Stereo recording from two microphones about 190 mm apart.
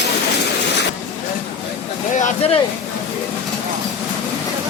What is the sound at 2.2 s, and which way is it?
Speech, 30° left (ahead or behind).